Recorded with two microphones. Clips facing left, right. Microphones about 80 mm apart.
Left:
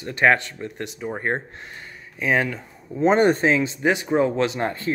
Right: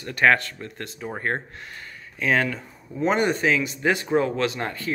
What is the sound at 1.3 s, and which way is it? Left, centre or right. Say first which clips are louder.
Speech: left 2 dB; centre.